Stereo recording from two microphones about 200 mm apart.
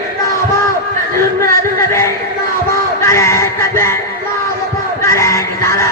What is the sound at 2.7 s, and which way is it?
Music, 15° left (ahead or behind).